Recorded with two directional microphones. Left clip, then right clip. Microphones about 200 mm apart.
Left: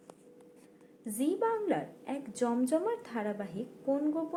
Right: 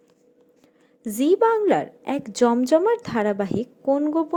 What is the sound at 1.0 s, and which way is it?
A woman's voice, 50° right (ahead or behind).